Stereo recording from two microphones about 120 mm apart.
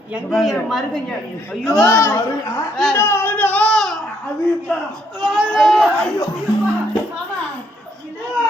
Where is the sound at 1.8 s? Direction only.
20° left (ahead or behind).